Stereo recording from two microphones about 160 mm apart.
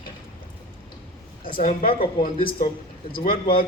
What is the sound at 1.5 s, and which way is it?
A man's voice, 65° left (ahead or behind).